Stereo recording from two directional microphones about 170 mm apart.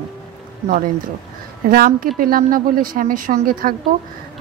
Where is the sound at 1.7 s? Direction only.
60° right (ahead or behind).